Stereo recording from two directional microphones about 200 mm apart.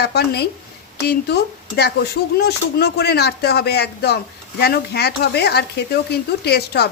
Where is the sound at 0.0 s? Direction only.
55° left (ahead or behind).